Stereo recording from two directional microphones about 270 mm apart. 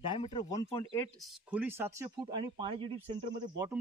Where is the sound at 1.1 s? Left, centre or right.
Centre.